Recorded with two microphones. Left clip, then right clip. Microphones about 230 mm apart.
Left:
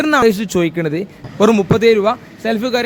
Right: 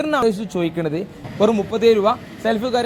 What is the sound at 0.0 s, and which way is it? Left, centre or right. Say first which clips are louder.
A man's voice: left 6 dB; left.